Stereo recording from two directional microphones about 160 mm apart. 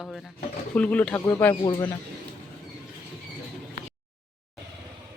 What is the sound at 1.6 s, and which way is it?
Speech, 25° left (ahead or behind).